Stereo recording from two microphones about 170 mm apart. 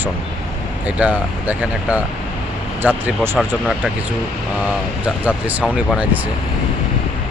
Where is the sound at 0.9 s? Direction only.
10° right (ahead or behind).